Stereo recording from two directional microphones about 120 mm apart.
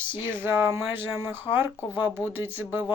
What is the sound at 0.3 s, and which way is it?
Speech, 20° right (ahead or behind).